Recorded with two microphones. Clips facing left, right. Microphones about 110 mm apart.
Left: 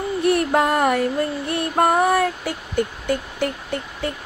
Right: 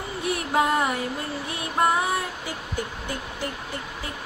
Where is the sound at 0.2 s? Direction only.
55° left (ahead or behind).